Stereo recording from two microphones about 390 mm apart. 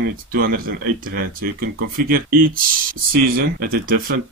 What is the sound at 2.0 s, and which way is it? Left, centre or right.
Speech, right.